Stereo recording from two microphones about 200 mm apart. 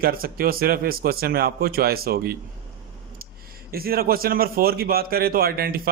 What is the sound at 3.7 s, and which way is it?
A man's voice, 50° right (ahead or behind).